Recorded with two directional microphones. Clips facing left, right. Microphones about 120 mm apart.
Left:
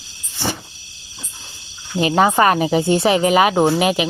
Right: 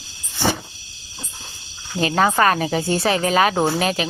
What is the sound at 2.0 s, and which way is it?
Speech, 20° left (ahead or behind).